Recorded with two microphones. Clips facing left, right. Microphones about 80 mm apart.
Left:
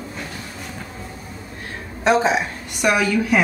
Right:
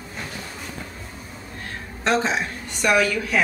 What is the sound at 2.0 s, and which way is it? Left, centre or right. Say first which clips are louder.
A woman's voice: left 5 dB; centre.